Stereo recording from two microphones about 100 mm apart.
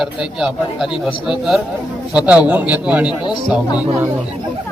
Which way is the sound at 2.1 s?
15° right (ahead or behind).